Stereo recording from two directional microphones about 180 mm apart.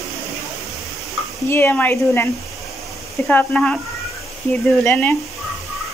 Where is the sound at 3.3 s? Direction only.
5° left (ahead or behind).